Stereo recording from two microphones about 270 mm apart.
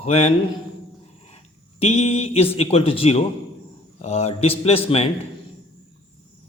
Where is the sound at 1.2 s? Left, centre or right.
Left.